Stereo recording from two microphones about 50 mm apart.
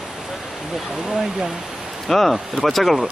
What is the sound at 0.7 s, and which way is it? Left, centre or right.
Speech, centre.